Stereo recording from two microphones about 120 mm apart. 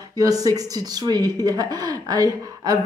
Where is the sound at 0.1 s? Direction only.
30° right (ahead or behind).